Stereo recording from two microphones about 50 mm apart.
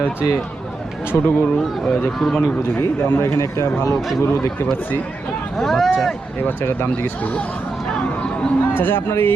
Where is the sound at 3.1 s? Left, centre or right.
Left.